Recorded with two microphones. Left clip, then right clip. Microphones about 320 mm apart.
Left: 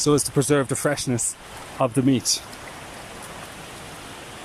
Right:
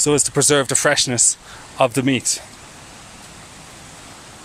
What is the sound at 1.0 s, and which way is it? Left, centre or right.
Speech, right.